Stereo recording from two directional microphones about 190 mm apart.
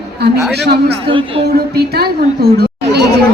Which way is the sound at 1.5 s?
55° right (ahead or behind).